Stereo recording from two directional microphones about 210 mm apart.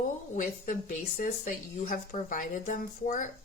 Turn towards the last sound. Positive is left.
turn(degrees=40)  # may be behind; listen again after turning